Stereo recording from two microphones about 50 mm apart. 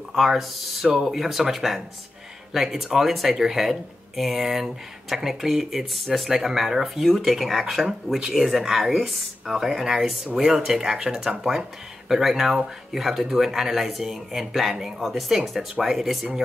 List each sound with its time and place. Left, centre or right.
0.1 s speech: centre